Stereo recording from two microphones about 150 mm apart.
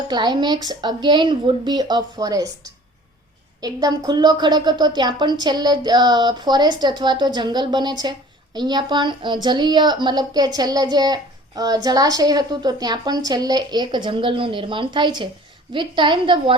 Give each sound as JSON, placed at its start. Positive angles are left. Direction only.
{"t": 0.1, "sound": "a woman's voice", "side_deg": -30}